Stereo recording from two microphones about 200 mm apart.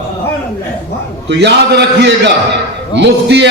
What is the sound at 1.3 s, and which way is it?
A man's voice, 60° right (ahead or behind).